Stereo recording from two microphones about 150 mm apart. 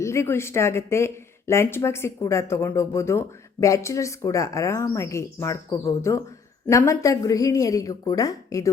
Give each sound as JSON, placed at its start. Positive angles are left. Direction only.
{"t": 0.0, "sound": "speech", "side_deg": 20}